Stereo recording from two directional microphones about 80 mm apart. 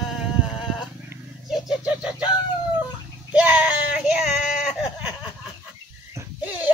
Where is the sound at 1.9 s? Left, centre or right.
Centre.